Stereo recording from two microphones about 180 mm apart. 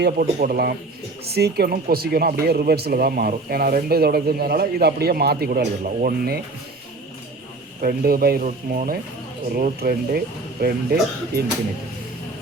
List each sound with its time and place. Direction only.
0.0 s speech: 55° right (ahead or behind)
7.8 s speech: 55° right (ahead or behind)